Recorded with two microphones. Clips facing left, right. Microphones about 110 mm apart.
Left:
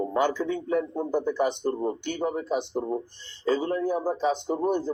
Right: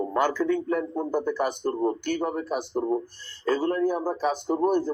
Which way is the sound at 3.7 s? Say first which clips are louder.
Right 1 dB; 25° left (ahead or behind).